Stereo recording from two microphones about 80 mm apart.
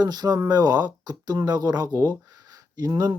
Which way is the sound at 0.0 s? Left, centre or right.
Right.